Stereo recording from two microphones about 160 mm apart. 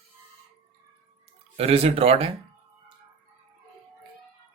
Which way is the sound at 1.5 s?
40° right (ahead or behind).